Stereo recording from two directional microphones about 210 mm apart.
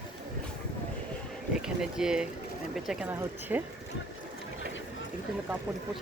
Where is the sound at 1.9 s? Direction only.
5° right (ahead or behind).